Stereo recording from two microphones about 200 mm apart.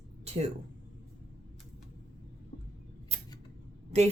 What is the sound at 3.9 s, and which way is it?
Speech, 30° right (ahead or behind).